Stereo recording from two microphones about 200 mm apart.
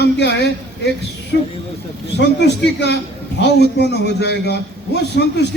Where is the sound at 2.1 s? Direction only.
60° left (ahead or behind).